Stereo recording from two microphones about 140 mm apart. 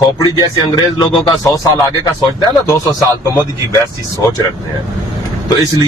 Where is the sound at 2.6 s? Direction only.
25° left (ahead or behind).